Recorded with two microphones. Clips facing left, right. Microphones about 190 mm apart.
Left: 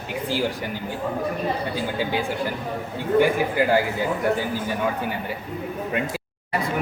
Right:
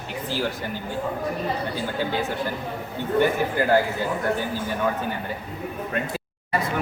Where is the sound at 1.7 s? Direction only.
15° left (ahead or behind).